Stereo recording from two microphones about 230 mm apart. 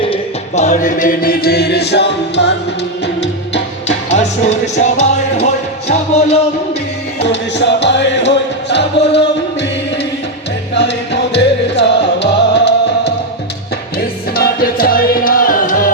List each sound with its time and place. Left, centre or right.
0.0 s music: left
3.8 s music: left
7.3 s music: left
14.3 s music: left